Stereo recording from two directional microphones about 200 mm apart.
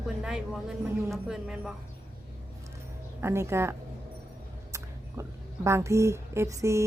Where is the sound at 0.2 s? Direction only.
5° right (ahead or behind).